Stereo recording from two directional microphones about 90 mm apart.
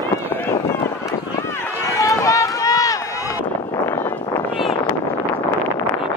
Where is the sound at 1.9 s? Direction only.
40° left (ahead or behind).